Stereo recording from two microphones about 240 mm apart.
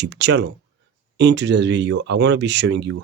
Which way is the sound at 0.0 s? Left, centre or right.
Right.